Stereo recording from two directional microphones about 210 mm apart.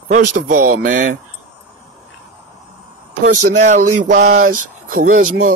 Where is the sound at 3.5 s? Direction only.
35° right (ahead or behind).